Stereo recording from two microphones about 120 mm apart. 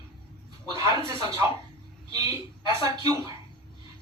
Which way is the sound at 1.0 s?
45° left (ahead or behind).